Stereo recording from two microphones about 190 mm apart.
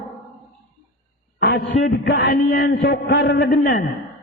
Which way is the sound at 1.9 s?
55° left (ahead or behind).